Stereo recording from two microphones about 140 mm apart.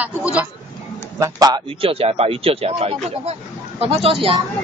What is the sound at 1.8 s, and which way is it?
Speech, 45° right (ahead or behind).